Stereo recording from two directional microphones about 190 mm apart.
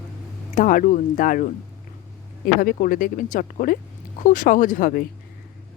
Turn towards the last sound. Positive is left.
turn(degrees=45)  # may be behind; listen again after turning